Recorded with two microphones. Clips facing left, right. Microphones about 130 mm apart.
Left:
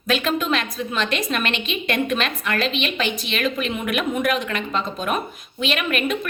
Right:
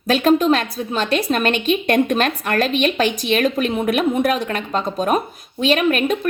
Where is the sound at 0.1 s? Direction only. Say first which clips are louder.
Right 7 dB; 40° right (ahead or behind).